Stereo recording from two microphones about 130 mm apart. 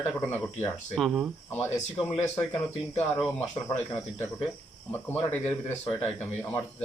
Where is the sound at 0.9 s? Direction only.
Centre (ahead or behind).